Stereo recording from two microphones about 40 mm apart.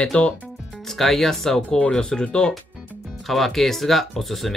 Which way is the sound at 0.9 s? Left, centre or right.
Centre.